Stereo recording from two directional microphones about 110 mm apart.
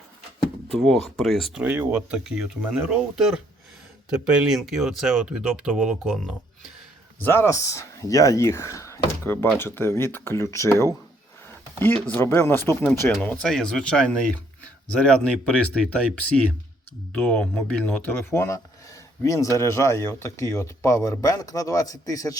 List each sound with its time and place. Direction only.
0.8 s speech: centre (ahead or behind)
1.5 s speech: 15° right (ahead or behind)
7.2 s speech: 20° left (ahead or behind)
12.0 s speech: 20° left (ahead or behind)
13.2 s speech: 5° left (ahead or behind); by 22.4 s 30° left (ahead or behind)